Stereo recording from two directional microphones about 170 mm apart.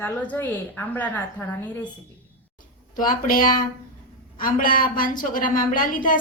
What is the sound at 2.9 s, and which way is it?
A woman's voice, 55° left (ahead or behind).